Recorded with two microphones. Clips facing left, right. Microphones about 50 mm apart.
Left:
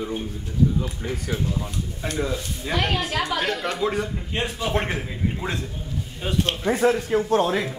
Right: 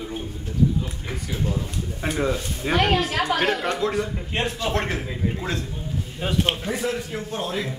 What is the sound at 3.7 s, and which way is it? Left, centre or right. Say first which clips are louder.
A man's voice: right 1 dB; centre.